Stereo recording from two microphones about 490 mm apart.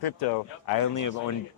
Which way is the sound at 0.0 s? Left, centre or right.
Left.